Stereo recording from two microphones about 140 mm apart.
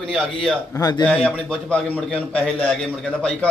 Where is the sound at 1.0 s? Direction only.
10° left (ahead or behind).